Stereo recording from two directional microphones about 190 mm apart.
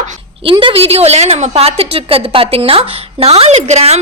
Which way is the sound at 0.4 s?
25° right (ahead or behind).